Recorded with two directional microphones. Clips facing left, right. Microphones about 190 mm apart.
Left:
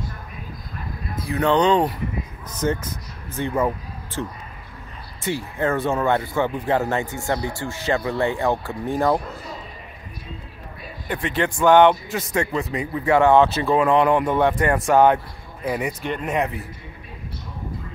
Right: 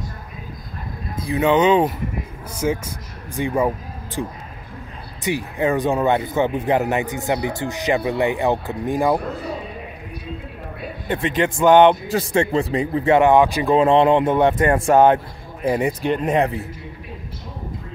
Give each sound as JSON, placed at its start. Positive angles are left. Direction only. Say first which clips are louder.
{"t": 1.2, "sound": "speech", "louder": "right 2 dB", "side_deg": -10}
{"t": 11.1, "sound": "speech", "louder": "right 3 dB", "side_deg": -20}
{"t": 12.1, "sound": "speech", "louder": "right 5 dB", "side_deg": -30}